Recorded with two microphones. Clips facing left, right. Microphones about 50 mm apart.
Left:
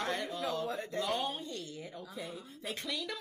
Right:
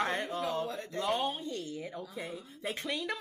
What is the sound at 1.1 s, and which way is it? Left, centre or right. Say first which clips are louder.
Speech: right 5 dB; centre.